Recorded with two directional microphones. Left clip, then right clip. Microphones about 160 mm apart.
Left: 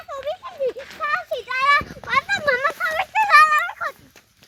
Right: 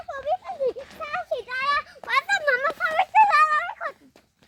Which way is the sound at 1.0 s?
30° left (ahead or behind).